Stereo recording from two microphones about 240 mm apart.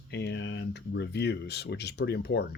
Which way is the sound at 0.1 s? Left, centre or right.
Left.